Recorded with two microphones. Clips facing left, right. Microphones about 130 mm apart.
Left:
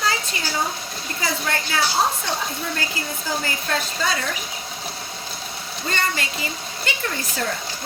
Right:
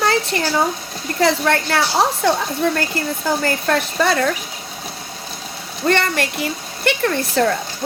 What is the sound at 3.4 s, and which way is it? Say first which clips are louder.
Speech: right 7 dB; 60° right (ahead or behind).